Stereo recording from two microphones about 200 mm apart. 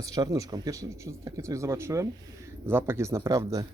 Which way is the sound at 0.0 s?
15° right (ahead or behind).